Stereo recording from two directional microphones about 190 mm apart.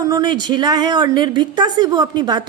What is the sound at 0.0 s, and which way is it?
A woman's voice, 20° right (ahead or behind).